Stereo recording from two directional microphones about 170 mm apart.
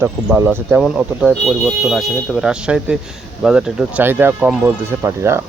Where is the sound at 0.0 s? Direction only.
15° right (ahead or behind).